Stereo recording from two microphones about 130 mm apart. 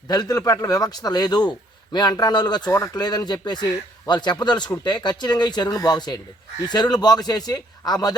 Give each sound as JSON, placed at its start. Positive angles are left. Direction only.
{"t": 0.1, "sound": "a man's voice", "side_deg": 30}